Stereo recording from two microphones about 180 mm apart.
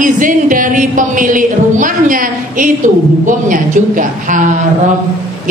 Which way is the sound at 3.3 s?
45° right (ahead or behind).